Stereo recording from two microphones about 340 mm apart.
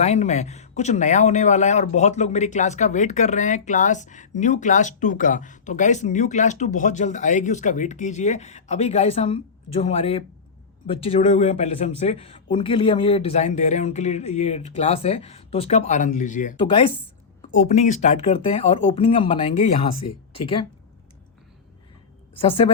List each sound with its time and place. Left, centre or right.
0.0 s speech: centre
22.4 s speech: centre